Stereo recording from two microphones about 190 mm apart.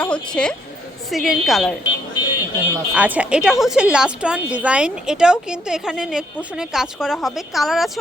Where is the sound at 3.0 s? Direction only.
5° right (ahead or behind).